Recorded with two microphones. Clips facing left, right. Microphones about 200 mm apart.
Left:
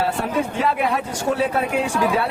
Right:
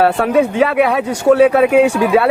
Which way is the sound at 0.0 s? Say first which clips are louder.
Right 9 dB; 70° right (ahead or behind).